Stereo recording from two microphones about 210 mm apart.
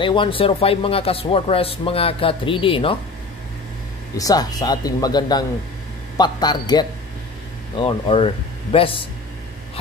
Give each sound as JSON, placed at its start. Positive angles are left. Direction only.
{"t": 0.0, "sound": "speech", "side_deg": 25}
{"t": 4.2, "sound": "speech", "side_deg": 15}